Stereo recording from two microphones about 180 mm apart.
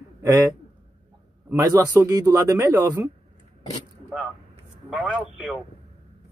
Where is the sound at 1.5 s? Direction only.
20° right (ahead or behind).